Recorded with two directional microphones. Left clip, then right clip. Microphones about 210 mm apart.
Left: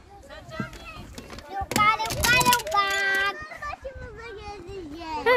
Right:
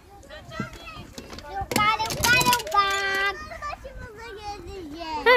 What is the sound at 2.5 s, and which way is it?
Child singing, 15° left (ahead or behind).